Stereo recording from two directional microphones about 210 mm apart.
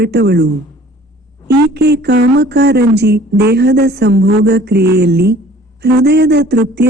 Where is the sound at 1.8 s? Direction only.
50° right (ahead or behind).